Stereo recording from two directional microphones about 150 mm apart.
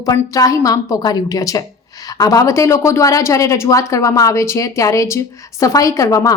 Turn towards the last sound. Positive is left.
turn(degrees=20)  # may be behind; listen again after turning